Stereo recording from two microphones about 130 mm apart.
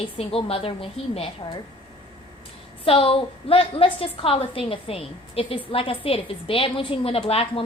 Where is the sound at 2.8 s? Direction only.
45° left (ahead or behind).